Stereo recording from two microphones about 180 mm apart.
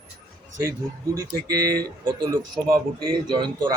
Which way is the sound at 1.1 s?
15° right (ahead or behind).